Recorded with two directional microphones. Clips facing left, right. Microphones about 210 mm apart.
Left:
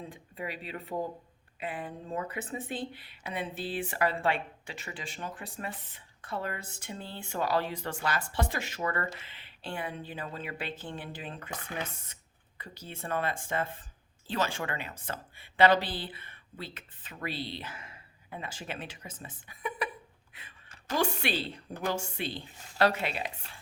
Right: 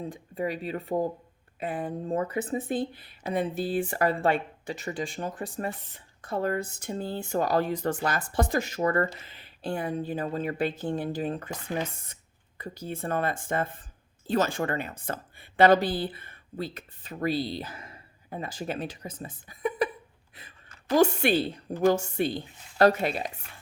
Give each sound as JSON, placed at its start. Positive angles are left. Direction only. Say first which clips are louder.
{"t": 0.1, "sound": "a woman's voice", "louder": "right 8 dB", "side_deg": -40}
{"t": 20.9, "sound": "speech", "louder": "right 9 dB", "side_deg": -45}